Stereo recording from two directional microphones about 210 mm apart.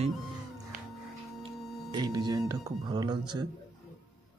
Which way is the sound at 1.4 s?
20° right (ahead or behind).